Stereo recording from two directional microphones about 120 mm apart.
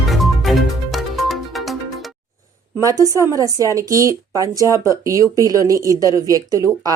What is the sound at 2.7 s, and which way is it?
Speech, 30° right (ahead or behind).